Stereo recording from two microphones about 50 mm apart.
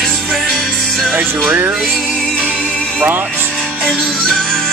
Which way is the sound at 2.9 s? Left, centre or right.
Right.